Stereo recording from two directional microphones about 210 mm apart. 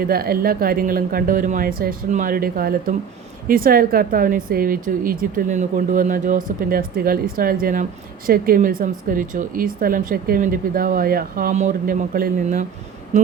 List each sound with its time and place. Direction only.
0.0 s speech: 45° right (ahead or behind)